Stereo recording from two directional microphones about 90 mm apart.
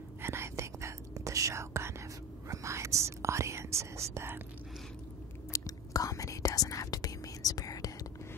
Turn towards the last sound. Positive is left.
turn(degrees=45)  # may be behind; listen again after turning